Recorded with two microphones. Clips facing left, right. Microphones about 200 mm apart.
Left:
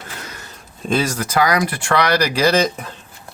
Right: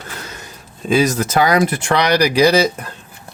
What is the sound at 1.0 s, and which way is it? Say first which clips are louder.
Speech: right 3 dB; 20° right (ahead or behind).